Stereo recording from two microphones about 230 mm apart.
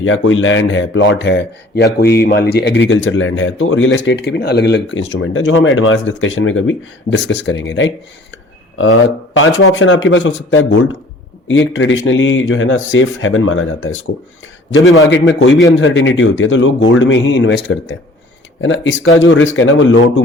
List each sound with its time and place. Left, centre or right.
0.0 s speech: left